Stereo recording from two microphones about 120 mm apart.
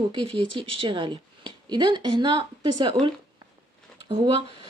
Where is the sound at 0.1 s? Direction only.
45° right (ahead or behind).